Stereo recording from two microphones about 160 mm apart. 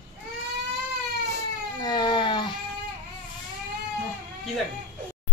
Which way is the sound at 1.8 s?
25° left (ahead or behind).